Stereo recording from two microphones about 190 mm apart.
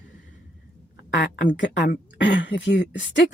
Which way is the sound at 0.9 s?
65° left (ahead or behind).